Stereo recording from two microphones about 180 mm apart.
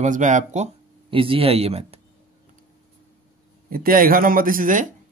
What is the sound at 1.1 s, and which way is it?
Speech, 30° right (ahead or behind).